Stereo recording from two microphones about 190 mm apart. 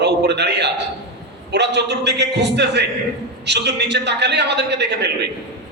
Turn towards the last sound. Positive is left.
turn(degrees=-65)  # may be behind; listen again after turning